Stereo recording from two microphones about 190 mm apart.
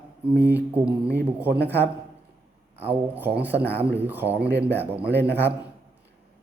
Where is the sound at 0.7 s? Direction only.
5° right (ahead or behind).